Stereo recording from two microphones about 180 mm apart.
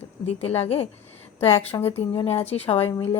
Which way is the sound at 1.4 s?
10° left (ahead or behind).